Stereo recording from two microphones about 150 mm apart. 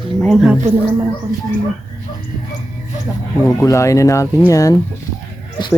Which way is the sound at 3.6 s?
20° left (ahead or behind).